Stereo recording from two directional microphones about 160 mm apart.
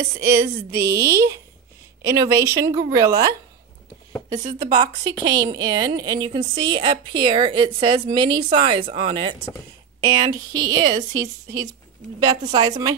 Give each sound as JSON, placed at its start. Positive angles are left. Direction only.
{"t": 0.2, "sound": "a woman's voice", "side_deg": -15}
{"t": 4.4, "sound": "speech", "side_deg": -50}
{"t": 4.7, "sound": "a woman's voice", "side_deg": -25}
{"t": 12.3, "sound": "a woman's voice", "side_deg": -25}